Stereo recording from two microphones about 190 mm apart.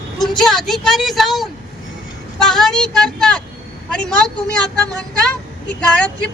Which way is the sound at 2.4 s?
Centre (ahead or behind).